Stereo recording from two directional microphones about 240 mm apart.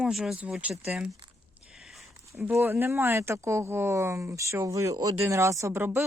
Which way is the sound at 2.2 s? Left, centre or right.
Centre.